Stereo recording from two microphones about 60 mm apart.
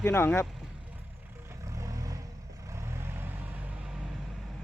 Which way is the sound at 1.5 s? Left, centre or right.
Right.